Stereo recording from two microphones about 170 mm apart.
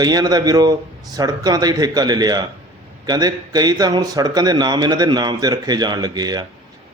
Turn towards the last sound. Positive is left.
turn(degrees=-25)  # may be behind; listen again after turning